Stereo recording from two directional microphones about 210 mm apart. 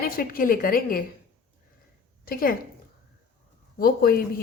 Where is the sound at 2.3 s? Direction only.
45° left (ahead or behind).